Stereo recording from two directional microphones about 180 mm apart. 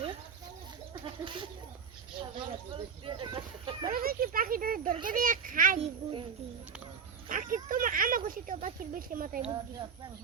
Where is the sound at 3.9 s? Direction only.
55° right (ahead or behind).